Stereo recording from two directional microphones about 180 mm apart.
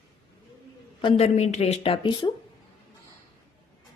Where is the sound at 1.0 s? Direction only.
35° left (ahead or behind).